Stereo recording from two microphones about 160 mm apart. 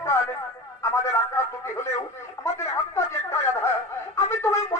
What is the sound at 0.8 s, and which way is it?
Speech, 20° left (ahead or behind).